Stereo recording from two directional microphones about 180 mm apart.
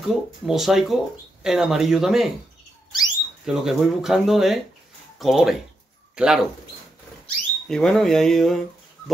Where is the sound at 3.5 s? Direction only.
Centre (ahead or behind).